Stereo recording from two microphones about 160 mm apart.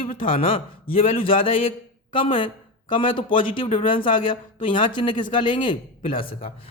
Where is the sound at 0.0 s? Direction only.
60° left (ahead or behind).